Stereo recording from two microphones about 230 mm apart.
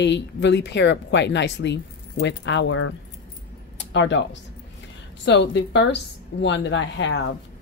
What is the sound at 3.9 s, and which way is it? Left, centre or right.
Speech, left.